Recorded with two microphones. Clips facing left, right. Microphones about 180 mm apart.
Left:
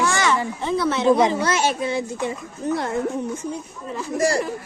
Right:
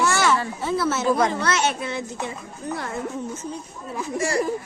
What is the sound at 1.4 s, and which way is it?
Speech, 15° left (ahead or behind).